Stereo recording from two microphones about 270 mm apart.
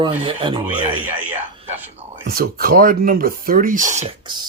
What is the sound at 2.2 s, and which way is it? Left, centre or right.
Speech, right.